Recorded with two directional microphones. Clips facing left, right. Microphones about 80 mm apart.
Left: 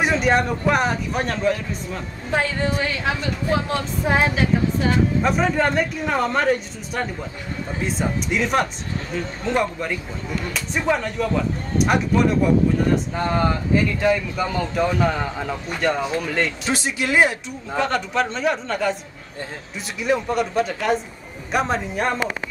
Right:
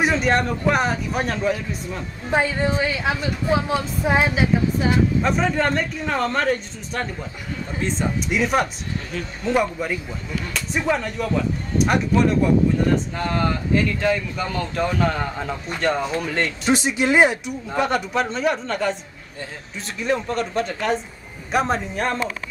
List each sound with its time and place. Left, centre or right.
0.0 s speech: centre
2.3 s speech: centre
5.2 s speech: centre
13.1 s speech: centre
16.7 s speech: right
17.7 s speech: centre
20.0 s speech: centre